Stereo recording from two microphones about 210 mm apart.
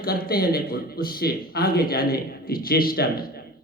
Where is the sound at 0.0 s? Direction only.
45° left (ahead or behind).